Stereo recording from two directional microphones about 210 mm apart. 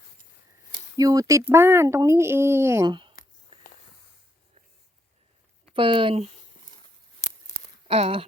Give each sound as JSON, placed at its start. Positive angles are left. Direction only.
{"t": 0.9, "sound": "speech", "side_deg": -15}
{"t": 5.7, "sound": "speech", "side_deg": -25}
{"t": 7.9, "sound": "speech", "side_deg": -30}